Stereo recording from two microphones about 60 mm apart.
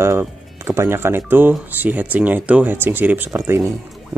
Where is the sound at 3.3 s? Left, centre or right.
Right.